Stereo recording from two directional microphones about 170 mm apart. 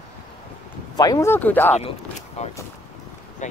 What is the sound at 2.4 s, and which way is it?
Speech, 40° left (ahead or behind).